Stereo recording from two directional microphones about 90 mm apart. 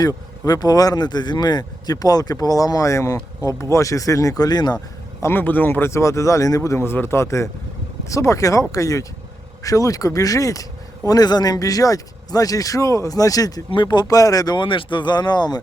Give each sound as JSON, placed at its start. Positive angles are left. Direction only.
{"t": 0.0, "sound": "speech", "side_deg": 45}
{"t": 5.2, "sound": "speech", "side_deg": 20}
{"t": 13.7, "sound": "speech", "side_deg": 60}